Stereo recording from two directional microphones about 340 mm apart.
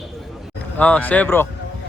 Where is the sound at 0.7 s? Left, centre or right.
Centre.